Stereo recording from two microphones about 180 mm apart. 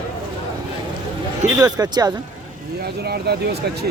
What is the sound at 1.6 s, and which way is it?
Speech, 20° right (ahead or behind).